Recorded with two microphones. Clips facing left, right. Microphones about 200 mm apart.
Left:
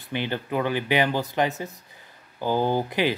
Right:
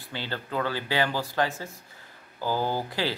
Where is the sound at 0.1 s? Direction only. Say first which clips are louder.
Left 5 dB; 20° left (ahead or behind).